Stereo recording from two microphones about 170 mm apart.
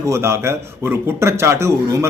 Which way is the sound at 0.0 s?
15° right (ahead or behind).